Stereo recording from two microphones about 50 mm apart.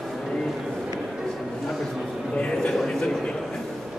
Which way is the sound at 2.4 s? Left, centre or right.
Centre.